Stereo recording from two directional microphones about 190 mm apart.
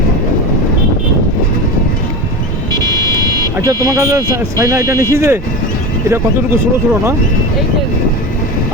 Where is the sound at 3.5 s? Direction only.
15° right (ahead or behind).